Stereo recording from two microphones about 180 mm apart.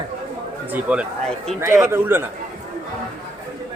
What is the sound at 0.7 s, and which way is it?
Speech, 5° right (ahead or behind).